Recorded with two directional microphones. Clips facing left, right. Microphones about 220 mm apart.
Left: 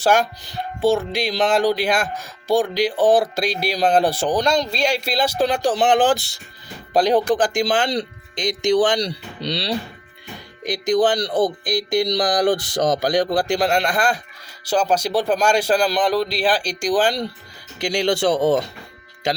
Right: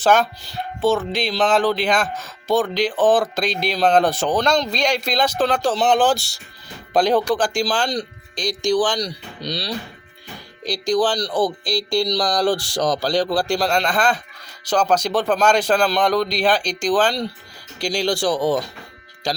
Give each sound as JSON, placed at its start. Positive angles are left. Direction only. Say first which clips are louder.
{"t": 0.0, "sound": "speech", "louder": "right 1 dB", "side_deg": 10}
{"t": 10.6, "sound": "speech", "louder": "left 1 dB", "side_deg": 20}
{"t": 18.0, "sound": "speech", "louder": "left 2 dB", "side_deg": 20}